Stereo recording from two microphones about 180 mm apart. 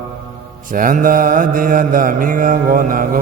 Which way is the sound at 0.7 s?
50° right (ahead or behind).